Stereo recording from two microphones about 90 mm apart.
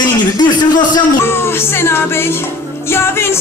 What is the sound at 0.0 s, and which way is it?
A man's voice, 50° left (ahead or behind).